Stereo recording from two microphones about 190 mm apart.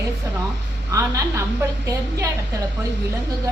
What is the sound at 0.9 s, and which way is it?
A woman's voice, 15° right (ahead or behind).